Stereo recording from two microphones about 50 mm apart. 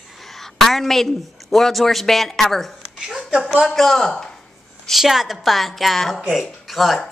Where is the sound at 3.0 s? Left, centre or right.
Centre.